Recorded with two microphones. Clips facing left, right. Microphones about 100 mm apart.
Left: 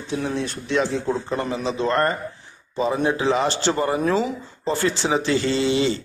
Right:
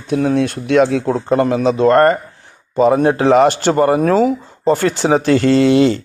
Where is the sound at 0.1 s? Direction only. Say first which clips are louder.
Right 10 dB; 60° right (ahead or behind).